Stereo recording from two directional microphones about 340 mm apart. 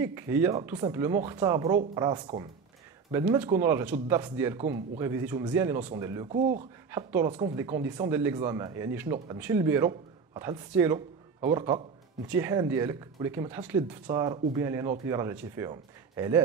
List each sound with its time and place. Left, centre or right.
0.0 s speech: centre
5.8 s speech: centre
6.0 s speech: centre